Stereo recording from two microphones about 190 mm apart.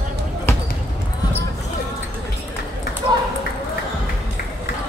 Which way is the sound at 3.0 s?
30° right (ahead or behind).